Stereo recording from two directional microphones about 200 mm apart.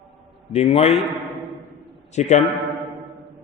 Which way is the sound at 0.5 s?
30° left (ahead or behind).